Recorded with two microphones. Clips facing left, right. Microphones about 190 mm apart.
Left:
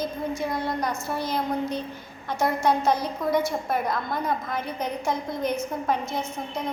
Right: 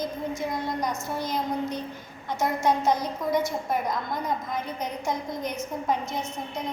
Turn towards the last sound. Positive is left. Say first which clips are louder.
# left 1 dB
turn(degrees=-20)  # may be behind; listen again after turning